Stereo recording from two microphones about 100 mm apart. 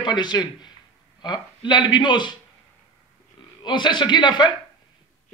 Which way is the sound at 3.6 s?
50° left (ahead or behind).